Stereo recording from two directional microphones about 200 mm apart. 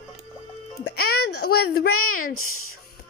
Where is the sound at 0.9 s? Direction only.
50° left (ahead or behind).